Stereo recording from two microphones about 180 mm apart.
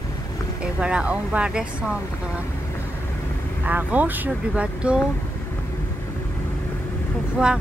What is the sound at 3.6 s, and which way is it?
Speech, 10° right (ahead or behind).